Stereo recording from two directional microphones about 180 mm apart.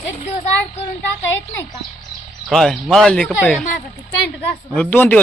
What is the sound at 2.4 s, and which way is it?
Speech, 5° left (ahead or behind).